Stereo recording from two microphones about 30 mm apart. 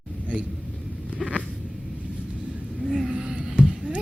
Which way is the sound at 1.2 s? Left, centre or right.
Centre.